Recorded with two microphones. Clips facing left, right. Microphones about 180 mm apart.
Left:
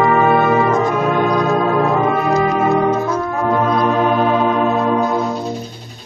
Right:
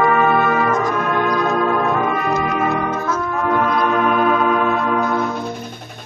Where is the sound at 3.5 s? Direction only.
25° left (ahead or behind).